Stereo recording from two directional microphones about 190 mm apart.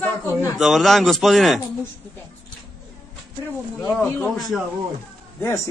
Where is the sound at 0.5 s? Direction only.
Centre (ahead or behind).